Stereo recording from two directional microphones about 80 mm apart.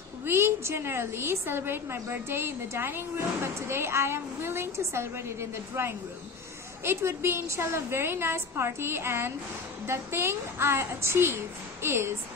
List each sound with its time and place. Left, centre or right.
0.2 s a woman's voice: right